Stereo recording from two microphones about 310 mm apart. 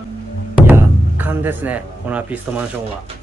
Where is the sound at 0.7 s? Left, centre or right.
Centre.